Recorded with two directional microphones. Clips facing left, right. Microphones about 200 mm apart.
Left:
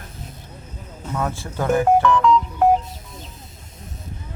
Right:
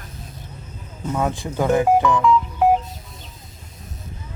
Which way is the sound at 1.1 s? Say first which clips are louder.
Right 3 dB; 15° right (ahead or behind).